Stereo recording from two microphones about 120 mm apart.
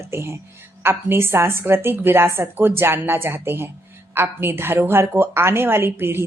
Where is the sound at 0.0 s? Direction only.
20° right (ahead or behind).